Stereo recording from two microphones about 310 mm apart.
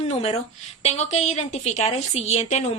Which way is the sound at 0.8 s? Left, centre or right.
Left.